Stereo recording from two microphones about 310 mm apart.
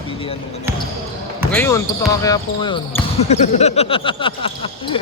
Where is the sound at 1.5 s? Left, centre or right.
Centre.